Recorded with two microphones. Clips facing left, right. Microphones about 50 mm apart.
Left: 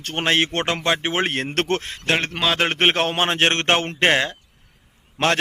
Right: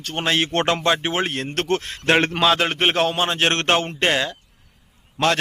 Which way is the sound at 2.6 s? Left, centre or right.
Left.